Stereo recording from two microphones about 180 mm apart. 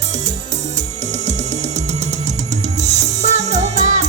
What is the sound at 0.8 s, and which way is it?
Music, 40° right (ahead or behind).